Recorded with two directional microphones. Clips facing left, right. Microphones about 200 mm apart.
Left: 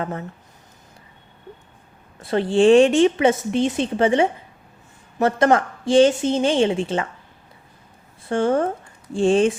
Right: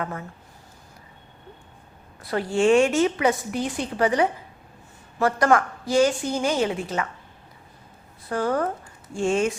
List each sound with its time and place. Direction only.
0.0 s a woman's voice: 30° left (ahead or behind)
2.2 s a woman's voice: 25° left (ahead or behind)
8.3 s a woman's voice: 25° left (ahead or behind)